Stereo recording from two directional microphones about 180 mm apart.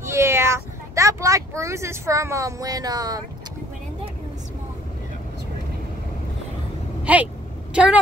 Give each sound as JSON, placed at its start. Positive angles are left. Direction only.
{"t": 0.0, "sound": "speech", "side_deg": -15}
{"t": 7.1, "sound": "vehicle", "side_deg": -5}
{"t": 7.7, "sound": "speech", "side_deg": -5}